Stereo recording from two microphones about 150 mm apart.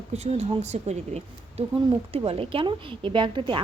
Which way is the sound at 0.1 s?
45° right (ahead or behind).